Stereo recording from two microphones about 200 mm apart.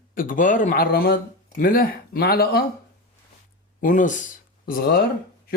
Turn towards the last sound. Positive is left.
turn(degrees=45)  # may be behind; listen again after turning